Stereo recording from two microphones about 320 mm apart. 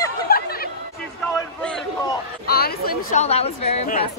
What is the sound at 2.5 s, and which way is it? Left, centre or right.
Speech, left.